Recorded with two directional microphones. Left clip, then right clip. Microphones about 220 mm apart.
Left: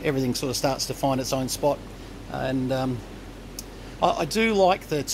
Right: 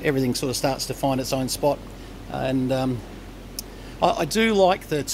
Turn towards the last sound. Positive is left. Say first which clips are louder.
# right 1 dB
turn(degrees=-10)  # may be behind; listen again after turning